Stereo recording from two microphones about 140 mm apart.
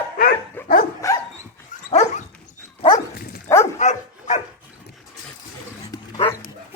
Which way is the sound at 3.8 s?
55° left (ahead or behind).